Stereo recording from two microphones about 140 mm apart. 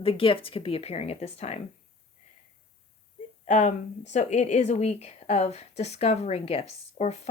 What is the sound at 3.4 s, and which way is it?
A woman's voice, 55° left (ahead or behind).